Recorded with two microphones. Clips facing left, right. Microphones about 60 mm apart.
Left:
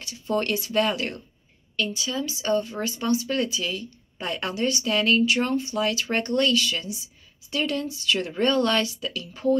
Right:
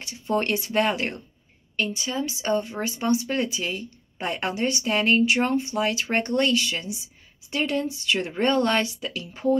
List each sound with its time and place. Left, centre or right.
0.0 s speech: right